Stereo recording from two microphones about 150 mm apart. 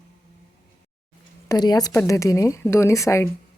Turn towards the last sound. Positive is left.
turn(degrees=20)  # may be behind; listen again after turning